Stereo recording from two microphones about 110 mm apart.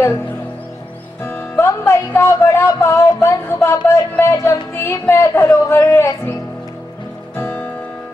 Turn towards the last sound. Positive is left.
turn(degrees=15)  # may be behind; listen again after turning